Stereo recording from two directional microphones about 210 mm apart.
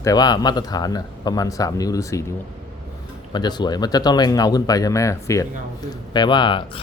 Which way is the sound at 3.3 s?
20° left (ahead or behind).